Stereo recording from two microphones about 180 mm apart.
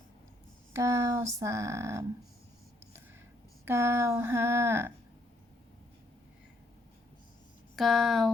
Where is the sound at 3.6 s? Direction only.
15° right (ahead or behind).